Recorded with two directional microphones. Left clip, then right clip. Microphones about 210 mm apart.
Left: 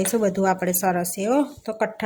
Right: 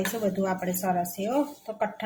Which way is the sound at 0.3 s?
55° left (ahead or behind).